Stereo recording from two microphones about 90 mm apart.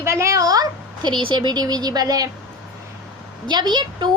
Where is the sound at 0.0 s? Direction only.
30° right (ahead or behind).